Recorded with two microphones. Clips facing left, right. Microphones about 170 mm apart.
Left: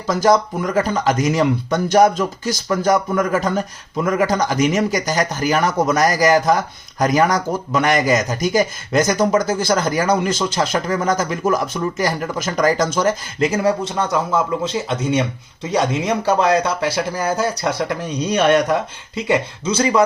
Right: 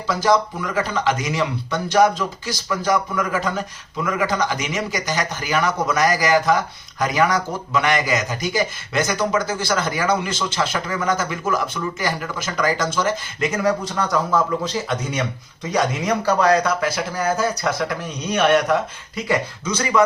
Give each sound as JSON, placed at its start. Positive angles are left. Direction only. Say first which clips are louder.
{"t": 0.1, "sound": "speech", "louder": "left 3 dB", "side_deg": 45}